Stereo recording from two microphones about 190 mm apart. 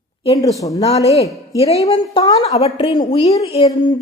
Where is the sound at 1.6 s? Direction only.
30° left (ahead or behind).